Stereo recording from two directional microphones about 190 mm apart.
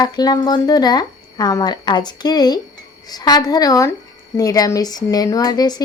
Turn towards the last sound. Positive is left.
turn(degrees=20)  # may be behind; listen again after turning